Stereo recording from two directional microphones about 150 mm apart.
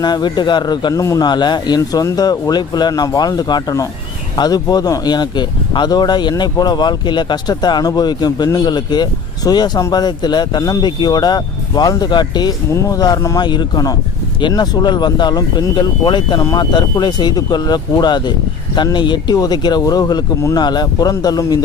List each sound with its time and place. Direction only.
0.0 s speech: 30° left (ahead or behind)